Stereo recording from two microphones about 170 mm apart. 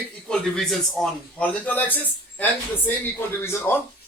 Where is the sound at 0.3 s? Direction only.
5° left (ahead or behind).